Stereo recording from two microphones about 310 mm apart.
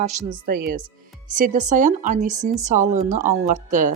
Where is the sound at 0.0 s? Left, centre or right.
Right.